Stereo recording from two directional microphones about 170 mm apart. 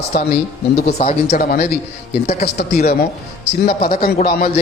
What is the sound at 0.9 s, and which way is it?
Speech, 40° left (ahead or behind).